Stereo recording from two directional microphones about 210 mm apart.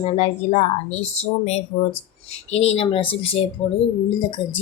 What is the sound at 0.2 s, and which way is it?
Speech, 30° left (ahead or behind).